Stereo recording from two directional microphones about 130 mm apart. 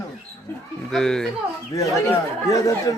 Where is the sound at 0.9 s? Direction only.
5° left (ahead or behind).